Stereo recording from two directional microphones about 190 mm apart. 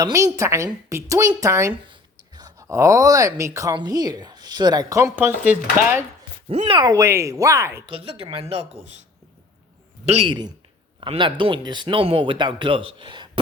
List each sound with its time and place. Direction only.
0.0 s speech: 20° right (ahead or behind)
6.5 s speech: 30° right (ahead or behind); by 7.9 s 15° right (ahead or behind)
7.9 s speech: 30° right (ahead or behind)
10.1 s speech: 30° right (ahead or behind)